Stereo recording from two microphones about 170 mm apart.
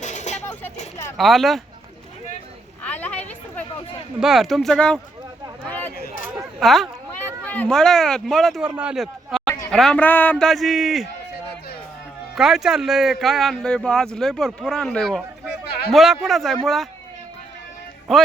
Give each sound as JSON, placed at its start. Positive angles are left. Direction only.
{"t": 0.0, "sound": "a sound", "side_deg": 45}
{"t": 1.1, "sound": "speech", "side_deg": 0}
{"t": 2.8, "sound": "a sound", "side_deg": 10}
{"t": 4.2, "sound": "speech", "side_deg": 0}
{"t": 6.6, "sound": "speech", "side_deg": 0}
{"t": 7.2, "sound": "speech", "side_deg": 10}
{"t": 12.3, "sound": "speech", "side_deg": 0}
{"t": 18.1, "sound": "speech", "side_deg": 0}